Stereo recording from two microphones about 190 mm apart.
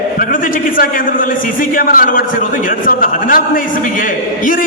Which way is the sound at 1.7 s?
45° left (ahead or behind).